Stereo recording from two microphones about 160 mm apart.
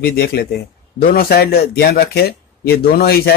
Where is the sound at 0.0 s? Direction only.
70° left (ahead or behind).